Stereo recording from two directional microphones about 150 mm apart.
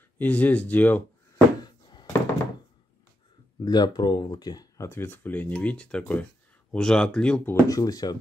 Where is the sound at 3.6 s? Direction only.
25° left (ahead or behind); by 7.5 s 5° left (ahead or behind).